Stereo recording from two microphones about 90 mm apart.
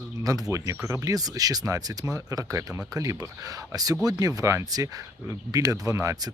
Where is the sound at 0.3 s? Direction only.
40° right (ahead or behind).